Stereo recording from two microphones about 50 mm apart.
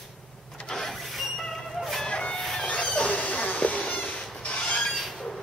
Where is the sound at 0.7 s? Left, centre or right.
Centre.